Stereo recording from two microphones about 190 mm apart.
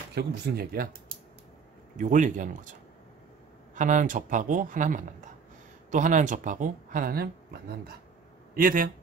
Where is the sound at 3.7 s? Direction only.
40° right (ahead or behind).